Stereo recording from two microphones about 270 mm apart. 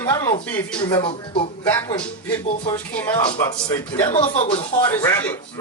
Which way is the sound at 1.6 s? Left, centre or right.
Centre.